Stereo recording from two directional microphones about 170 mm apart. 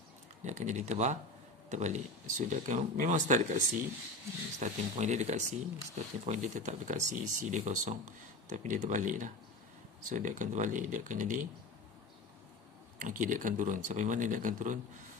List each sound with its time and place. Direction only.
0.4 s speech: 45° right (ahead or behind)
13.0 s speech: 50° right (ahead or behind)